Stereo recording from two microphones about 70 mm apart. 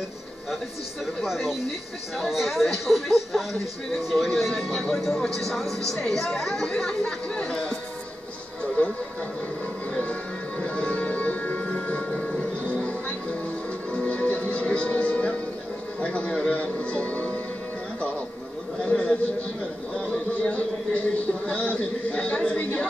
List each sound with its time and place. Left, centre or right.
1.2 s speech: centre
10.6 s music: centre
16.0 s speech: centre
18.9 s a sound: centre